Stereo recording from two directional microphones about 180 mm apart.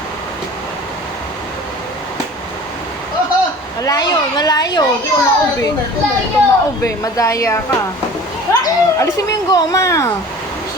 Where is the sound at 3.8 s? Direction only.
20° left (ahead or behind).